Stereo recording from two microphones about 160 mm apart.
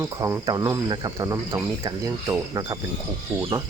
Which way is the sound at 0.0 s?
20° right (ahead or behind).